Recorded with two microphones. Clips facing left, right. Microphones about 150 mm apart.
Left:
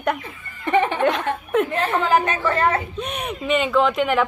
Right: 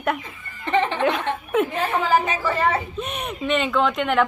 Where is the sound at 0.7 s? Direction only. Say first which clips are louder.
Left 2 dB; 10° left (ahead or behind).